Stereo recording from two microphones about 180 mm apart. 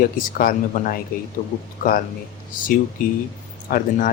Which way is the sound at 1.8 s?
50° left (ahead or behind).